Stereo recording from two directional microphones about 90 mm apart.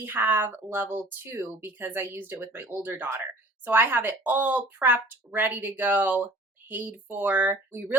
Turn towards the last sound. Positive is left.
turn(degrees=-25)  # may be behind; listen again after turning